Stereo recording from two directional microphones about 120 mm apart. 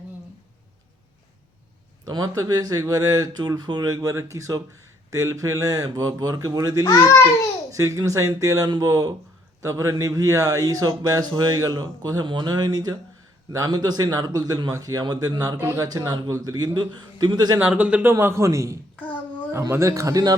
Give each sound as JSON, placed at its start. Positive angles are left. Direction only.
{"t": 2.0, "sound": "speech", "side_deg": -30}
{"t": 6.8, "sound": "a child's voice", "side_deg": 30}
{"t": 7.7, "sound": "speech", "side_deg": -25}
{"t": 15.5, "sound": "speech", "side_deg": -20}
{"t": 15.9, "sound": "speech", "side_deg": -30}
{"t": 17.6, "sound": "speech", "side_deg": -10}
{"t": 18.9, "sound": "child singing", "side_deg": 15}
{"t": 19.5, "sound": "speech", "side_deg": -20}